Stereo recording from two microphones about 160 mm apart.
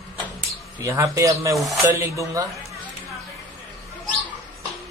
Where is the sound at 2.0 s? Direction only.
20° right (ahead or behind).